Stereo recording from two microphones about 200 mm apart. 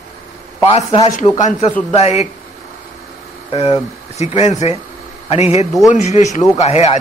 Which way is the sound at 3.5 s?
30° left (ahead or behind).